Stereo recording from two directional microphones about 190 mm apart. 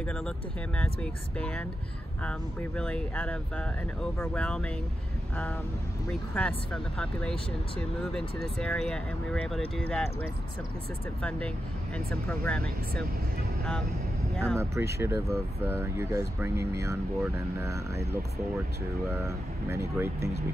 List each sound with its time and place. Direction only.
0.0 s speech: 5° left (ahead or behind)
6.3 s speech: 5° left (ahead or behind)
8.5 s speech: 5° left (ahead or behind)
11.2 s speech: 5° left (ahead or behind)
14.3 s speech: 5° left (ahead or behind)
14.6 s speech: 15° right (ahead or behind)